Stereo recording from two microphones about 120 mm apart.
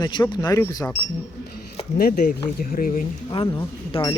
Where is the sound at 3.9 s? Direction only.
35° left (ahead or behind).